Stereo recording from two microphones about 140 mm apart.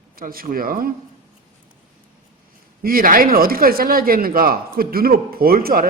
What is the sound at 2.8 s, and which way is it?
Speech, 90° right.